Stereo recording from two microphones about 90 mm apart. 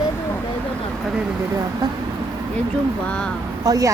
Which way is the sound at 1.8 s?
50° right (ahead or behind).